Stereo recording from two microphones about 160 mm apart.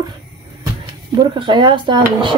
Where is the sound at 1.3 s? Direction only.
30° right (ahead or behind).